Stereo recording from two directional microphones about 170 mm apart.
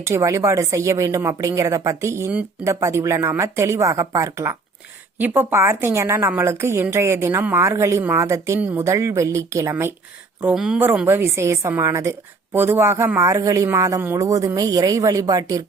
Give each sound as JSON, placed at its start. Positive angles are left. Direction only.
{"t": 0.0, "sound": "a woman's voice", "side_deg": -15}
{"t": 10.4, "sound": "a woman's voice", "side_deg": -5}